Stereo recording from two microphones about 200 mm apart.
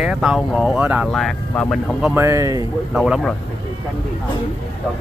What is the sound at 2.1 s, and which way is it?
Speech, 15° right (ahead or behind).